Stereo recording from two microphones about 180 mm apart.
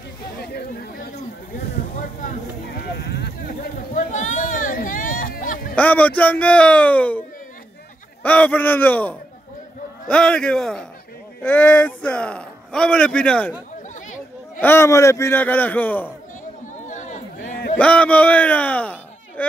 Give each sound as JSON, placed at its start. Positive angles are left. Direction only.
{"t": 0.4, "sound": "chatter", "side_deg": 60}
{"t": 3.0, "sound": "a sound", "side_deg": 65}
{"t": 3.9, "sound": "a sound", "side_deg": 45}
{"t": 5.8, "sound": "a man's voice", "side_deg": 10}
{"t": 14.6, "sound": "a man's voice", "side_deg": 15}
{"t": 16.8, "sound": "chatter", "side_deg": 45}
{"t": 17.7, "sound": "a man's voice", "side_deg": 5}